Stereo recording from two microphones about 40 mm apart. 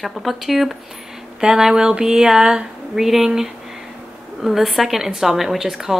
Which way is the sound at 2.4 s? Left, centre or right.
Right.